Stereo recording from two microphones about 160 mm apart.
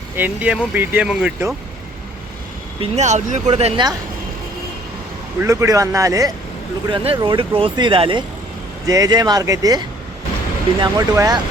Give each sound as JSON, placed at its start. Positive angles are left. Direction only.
{"t": 0.2, "sound": "speech", "side_deg": -10}
{"t": 2.8, "sound": "speech", "side_deg": -45}
{"t": 5.4, "sound": "speech", "side_deg": -20}
{"t": 6.8, "sound": "speech", "side_deg": -35}